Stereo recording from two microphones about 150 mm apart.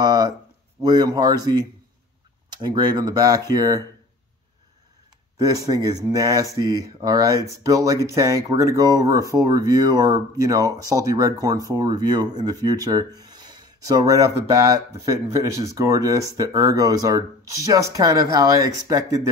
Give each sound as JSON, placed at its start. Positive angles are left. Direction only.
{"t": 0.0, "sound": "a sound", "side_deg": -25}
{"t": 0.7, "sound": "speech", "side_deg": -25}
{"t": 5.4, "sound": "speech", "side_deg": -25}